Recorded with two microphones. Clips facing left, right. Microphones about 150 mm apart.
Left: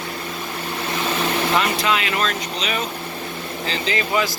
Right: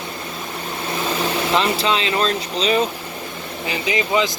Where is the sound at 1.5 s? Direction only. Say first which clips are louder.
Right 4 dB; 25° right (ahead or behind).